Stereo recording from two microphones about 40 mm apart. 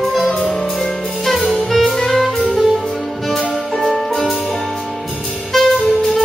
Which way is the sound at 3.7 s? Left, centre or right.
Centre.